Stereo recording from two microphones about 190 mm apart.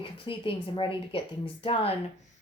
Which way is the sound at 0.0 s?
25° left (ahead or behind).